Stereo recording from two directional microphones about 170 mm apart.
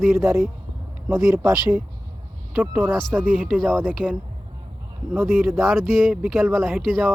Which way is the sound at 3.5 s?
5° left (ahead or behind).